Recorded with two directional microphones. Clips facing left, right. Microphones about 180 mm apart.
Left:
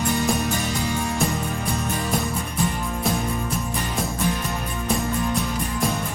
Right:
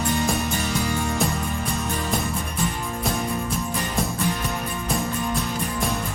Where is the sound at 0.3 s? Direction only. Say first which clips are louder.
Left 1 dB; centre (ahead or behind).